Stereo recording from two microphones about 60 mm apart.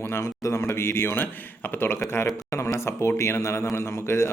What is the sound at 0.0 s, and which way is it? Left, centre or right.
A man's voice, left.